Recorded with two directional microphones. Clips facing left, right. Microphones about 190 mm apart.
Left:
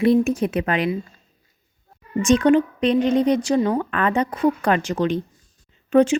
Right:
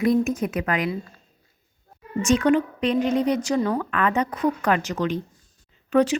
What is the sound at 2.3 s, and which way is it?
Speech, 30° left (ahead or behind).